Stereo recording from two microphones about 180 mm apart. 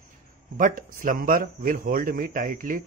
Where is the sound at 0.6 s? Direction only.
50° right (ahead or behind).